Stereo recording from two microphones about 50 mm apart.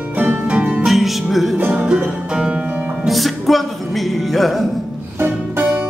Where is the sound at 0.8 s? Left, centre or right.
Centre.